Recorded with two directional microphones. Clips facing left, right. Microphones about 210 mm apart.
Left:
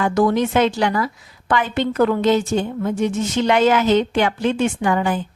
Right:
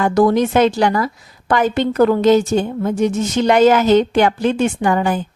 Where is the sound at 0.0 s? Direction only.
35° right (ahead or behind).